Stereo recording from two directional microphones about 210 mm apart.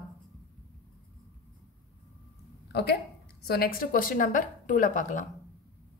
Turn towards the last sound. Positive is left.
turn(degrees=40)  # may be behind; listen again after turning